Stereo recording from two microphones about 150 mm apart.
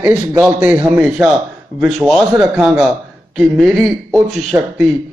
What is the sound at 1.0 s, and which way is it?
Speech, centre (ahead or behind).